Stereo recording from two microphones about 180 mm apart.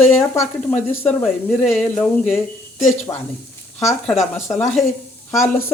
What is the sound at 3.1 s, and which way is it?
Speech, 20° left (ahead or behind).